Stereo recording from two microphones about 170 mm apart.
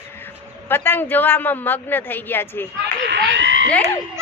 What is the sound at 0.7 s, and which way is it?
A man's voice, 10° left (ahead or behind).